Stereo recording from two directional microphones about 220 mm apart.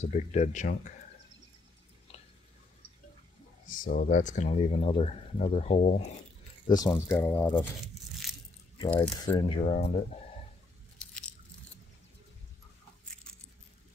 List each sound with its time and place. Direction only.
0.0 s speech: 30° left (ahead or behind)
3.6 s speech: 40° left (ahead or behind)
6.9 s speech: 10° left (ahead or behind)
7.8 s crumpling: centre (ahead or behind)
9.1 s speech: 20° left (ahead or behind)